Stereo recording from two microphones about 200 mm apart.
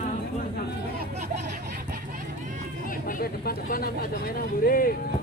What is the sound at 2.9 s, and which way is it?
Vehicle, 45° left (ahead or behind).